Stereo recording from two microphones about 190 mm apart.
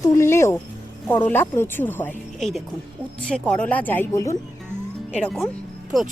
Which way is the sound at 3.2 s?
5° left (ahead or behind).